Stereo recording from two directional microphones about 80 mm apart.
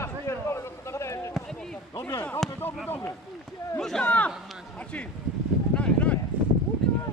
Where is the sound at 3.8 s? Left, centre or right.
Centre.